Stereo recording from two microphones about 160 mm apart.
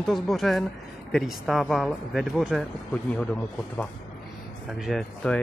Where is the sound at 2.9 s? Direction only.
10° left (ahead or behind).